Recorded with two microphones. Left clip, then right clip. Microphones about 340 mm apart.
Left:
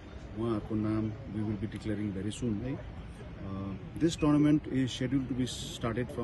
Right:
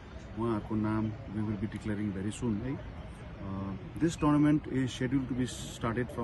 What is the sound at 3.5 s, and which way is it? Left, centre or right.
Speech, centre.